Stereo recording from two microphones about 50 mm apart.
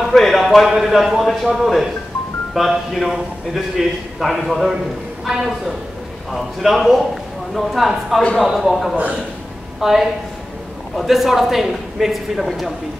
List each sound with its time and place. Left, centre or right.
0.0 s a sound: centre
0.7 s a woman's voice: centre
8.9 s a man's voice: right
9.8 s a woman's voice: centre